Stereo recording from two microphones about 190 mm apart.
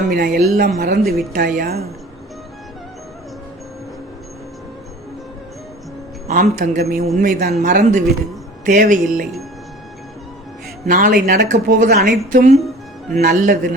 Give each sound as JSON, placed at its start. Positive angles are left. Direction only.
{"t": 0.1, "sound": "a woman's voice", "side_deg": -50}
{"t": 6.2, "sound": "speech", "side_deg": -40}
{"t": 10.8, "sound": "speech", "side_deg": -45}